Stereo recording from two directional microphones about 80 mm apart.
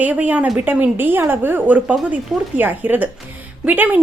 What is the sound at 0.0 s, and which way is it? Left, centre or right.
A woman's voice, centre.